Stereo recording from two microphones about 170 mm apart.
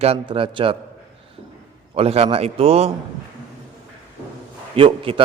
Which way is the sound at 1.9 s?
35° right (ahead or behind).